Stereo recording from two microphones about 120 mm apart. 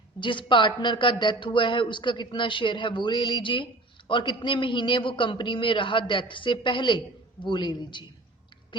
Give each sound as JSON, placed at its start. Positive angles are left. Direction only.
{"t": 0.2, "sound": "a woman's voice", "side_deg": 45}